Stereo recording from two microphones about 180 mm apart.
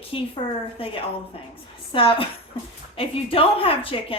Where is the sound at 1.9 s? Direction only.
30° left (ahead or behind).